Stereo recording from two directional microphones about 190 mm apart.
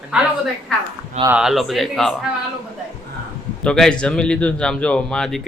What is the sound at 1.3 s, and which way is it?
Speech, 5° right (ahead or behind).